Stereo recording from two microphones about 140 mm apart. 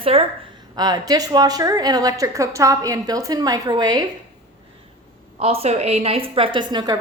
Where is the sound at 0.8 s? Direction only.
30° right (ahead or behind).